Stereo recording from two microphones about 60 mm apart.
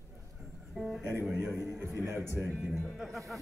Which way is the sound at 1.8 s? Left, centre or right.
Right.